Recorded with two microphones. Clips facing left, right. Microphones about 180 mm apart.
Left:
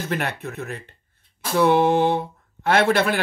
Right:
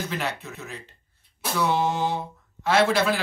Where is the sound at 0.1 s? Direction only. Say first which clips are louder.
Left 4 dB; 55° left (ahead or behind).